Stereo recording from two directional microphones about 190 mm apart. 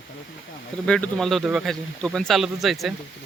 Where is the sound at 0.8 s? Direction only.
5° left (ahead or behind).